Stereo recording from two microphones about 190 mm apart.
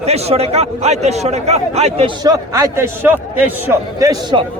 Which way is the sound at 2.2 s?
15° right (ahead or behind).